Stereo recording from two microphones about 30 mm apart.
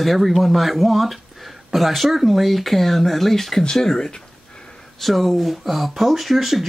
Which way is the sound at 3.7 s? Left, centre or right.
Centre.